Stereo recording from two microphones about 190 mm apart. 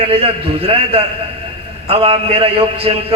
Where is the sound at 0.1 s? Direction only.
30° right (ahead or behind).